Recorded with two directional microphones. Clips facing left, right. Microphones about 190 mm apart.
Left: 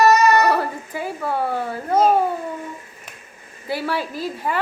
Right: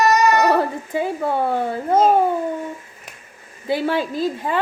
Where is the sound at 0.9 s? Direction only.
25° right (ahead or behind).